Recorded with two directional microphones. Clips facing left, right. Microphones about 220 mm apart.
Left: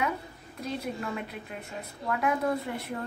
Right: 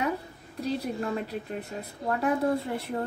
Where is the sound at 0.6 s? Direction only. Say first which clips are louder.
Right 4 dB; 35° right (ahead or behind).